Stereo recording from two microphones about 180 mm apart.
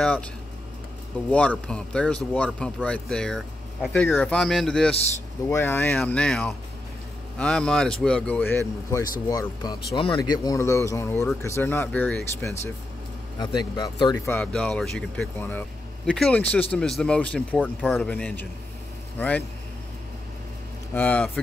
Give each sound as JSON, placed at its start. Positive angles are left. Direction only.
{"t": 0.0, "sound": "speech", "side_deg": 5}
{"t": 1.3, "sound": "speech", "side_deg": 10}
{"t": 13.4, "sound": "a man's voice", "side_deg": 25}
{"t": 20.9, "sound": "speech", "side_deg": 10}